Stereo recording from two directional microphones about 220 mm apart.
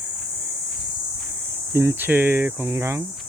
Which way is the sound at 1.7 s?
10° right (ahead or behind).